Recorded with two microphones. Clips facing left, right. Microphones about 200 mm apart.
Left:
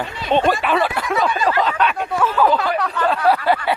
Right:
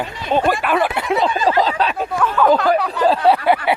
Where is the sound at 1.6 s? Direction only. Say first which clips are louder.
Right 1 dB; 35° right (ahead or behind).